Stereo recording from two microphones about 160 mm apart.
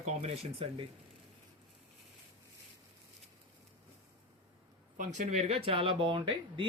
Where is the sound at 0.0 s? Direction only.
40° right (ahead or behind).